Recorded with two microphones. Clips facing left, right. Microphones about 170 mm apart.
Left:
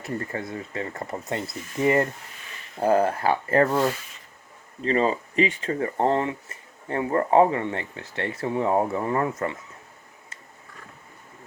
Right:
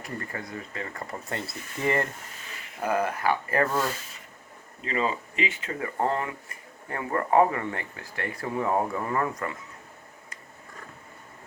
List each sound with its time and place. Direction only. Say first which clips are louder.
0.0 s speech: left 5 dB; 25° left (ahead or behind)
2.8 s speech: left 5 dB; 30° left (ahead or behind)